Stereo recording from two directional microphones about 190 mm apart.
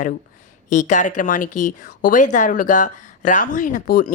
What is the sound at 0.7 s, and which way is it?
Speech, 40° left (ahead or behind).